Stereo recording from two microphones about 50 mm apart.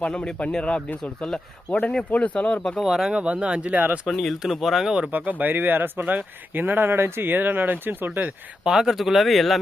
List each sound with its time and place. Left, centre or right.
0.0 s speech: left
2.7 s speech: centre
3.1 s speech: right
4.1 s speech: centre
5.1 s speech: right
8.6 s speech: centre